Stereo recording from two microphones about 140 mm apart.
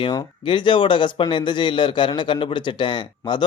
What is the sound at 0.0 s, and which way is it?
Speech, 35° left (ahead or behind).